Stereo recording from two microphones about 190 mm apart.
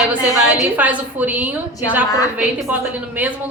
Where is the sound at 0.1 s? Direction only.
10° right (ahead or behind).